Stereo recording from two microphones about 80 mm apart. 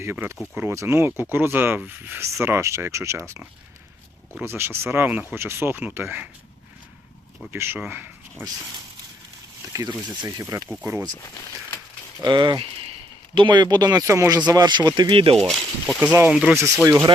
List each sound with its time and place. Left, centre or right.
0.0 s speech: right
4.4 s speech: right
4.9 s speech: centre
7.5 s speech: right
10.5 s speech: right
12.2 s speech: right
14.1 s speech: right
14.4 s speech: right
15.4 s speech: centre
16.8 s speech: right